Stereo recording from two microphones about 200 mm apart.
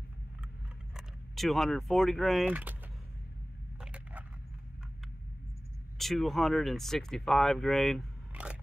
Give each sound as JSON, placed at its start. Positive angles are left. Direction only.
{"t": 0.9, "sound": "speech", "side_deg": 0}
{"t": 3.8, "sound": "a sound", "side_deg": -5}
{"t": 5.9, "sound": "speech", "side_deg": 0}